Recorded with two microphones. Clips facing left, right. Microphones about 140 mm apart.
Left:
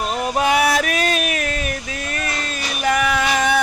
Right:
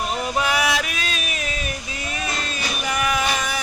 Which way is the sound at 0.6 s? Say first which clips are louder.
Left 6 dB; 50° left (ahead or behind).